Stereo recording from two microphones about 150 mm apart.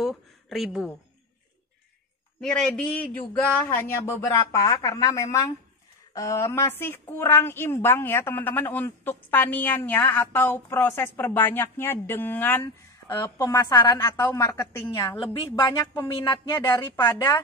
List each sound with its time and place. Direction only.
0.0 s a sound: centre (ahead or behind)
2.4 s a man's voice: 5° left (ahead or behind)
13.1 s a man's voice: 25° left (ahead or behind)
17.0 s a woman's voice: 15° left (ahead or behind)